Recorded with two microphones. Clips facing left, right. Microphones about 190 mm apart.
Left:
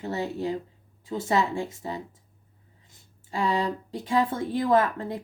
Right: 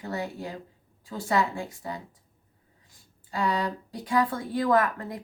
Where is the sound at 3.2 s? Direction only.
25° left (ahead or behind).